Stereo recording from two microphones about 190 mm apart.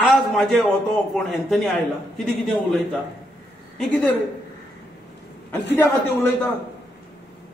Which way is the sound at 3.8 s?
5° left (ahead or behind).